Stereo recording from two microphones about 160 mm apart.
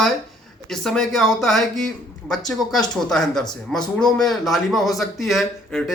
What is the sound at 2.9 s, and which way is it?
Speech, 5° left (ahead or behind).